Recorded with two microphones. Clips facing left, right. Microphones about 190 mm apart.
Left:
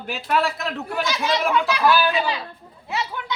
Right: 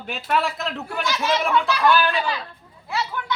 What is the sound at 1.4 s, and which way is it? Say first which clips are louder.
Speech: left 1 dB; centre (ahead or behind).